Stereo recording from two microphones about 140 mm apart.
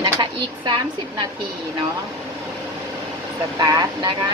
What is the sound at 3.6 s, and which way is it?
Speech, 25° right (ahead or behind).